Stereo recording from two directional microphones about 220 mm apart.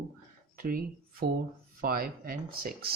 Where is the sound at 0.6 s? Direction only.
40° right (ahead or behind).